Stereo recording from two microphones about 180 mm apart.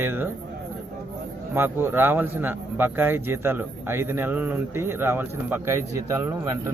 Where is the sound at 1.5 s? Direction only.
10° right (ahead or behind).